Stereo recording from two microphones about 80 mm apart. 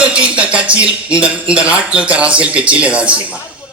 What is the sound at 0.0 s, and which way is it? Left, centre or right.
A man's voice, centre.